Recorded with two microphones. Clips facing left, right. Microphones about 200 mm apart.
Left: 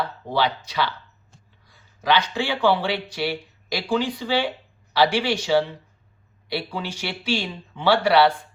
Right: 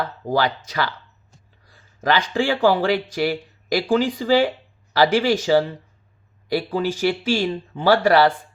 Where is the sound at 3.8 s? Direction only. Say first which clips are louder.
Right 3 dB; 50° right (ahead or behind).